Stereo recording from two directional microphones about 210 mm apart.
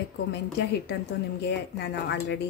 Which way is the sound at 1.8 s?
55° left (ahead or behind).